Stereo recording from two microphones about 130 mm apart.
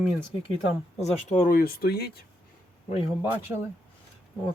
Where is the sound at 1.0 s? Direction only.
60° left (ahead or behind); by 1.6 s 75° left (ahead or behind).